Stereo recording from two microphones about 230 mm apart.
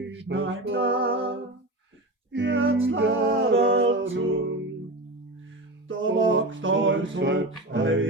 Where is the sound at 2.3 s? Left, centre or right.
Right.